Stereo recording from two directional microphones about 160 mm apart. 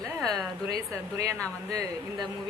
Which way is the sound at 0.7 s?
20° right (ahead or behind).